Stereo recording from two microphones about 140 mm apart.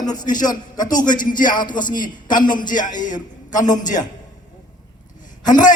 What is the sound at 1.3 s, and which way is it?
Speech, 30° left (ahead or behind).